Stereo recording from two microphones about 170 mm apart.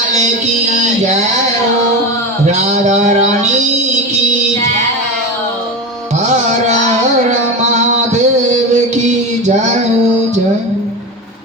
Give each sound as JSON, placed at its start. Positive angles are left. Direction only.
{"t": 2.5, "sound": "music", "side_deg": -45}
{"t": 7.3, "sound": "music", "side_deg": -45}